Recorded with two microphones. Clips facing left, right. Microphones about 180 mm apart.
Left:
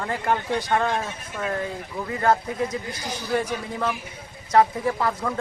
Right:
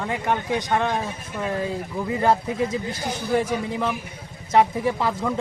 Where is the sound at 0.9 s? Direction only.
15° right (ahead or behind).